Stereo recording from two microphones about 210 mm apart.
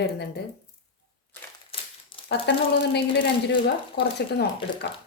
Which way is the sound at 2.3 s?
55° left (ahead or behind).